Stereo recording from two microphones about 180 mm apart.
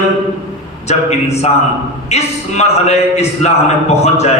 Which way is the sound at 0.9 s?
40° left (ahead or behind).